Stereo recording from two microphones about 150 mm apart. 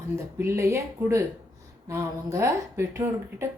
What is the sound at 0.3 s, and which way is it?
Speech, 15° right (ahead or behind).